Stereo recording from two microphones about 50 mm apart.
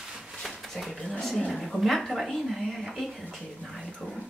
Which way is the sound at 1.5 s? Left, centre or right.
Centre.